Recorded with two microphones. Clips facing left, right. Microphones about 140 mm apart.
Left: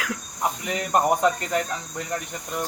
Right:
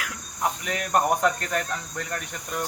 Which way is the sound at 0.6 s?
20° left (ahead or behind).